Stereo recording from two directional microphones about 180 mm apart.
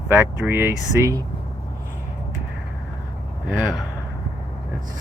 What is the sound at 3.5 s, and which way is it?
Speech, 5° right (ahead or behind).